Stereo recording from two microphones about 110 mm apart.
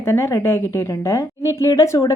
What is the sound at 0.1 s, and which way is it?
Speech, 25° left (ahead or behind).